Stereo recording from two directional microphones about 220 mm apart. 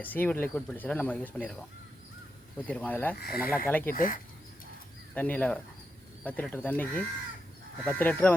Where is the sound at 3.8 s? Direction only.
40° left (ahead or behind).